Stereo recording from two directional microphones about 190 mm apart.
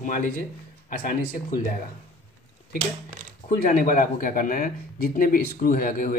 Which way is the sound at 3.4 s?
50° left (ahead or behind).